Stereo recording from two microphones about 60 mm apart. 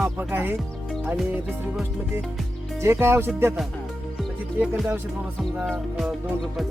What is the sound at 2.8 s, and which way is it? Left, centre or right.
Speech, right.